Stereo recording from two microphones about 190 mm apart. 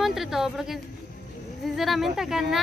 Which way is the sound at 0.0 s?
Centre (ahead or behind).